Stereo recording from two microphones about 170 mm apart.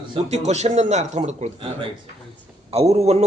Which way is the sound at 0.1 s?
40° right (ahead or behind).